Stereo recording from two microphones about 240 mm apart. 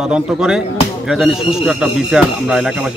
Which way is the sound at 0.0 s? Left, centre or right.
Centre.